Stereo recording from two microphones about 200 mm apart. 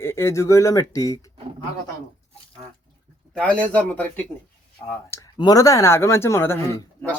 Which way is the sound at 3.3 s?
5° left (ahead or behind).